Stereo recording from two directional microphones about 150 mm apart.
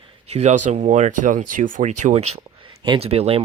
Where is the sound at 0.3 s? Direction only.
45° right (ahead or behind).